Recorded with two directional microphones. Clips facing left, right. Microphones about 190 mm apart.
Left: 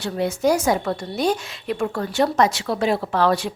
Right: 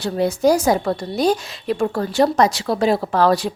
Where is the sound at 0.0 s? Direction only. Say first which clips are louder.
Right 4 dB; 35° right (ahead or behind).